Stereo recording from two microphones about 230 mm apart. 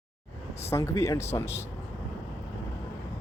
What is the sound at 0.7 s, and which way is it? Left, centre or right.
Speech, centre.